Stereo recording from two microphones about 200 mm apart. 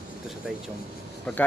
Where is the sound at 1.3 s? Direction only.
5° left (ahead or behind).